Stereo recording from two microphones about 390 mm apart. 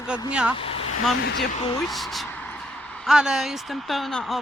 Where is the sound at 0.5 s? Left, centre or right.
Centre.